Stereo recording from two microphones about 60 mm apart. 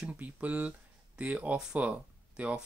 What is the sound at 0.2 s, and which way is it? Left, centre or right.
Speech, right.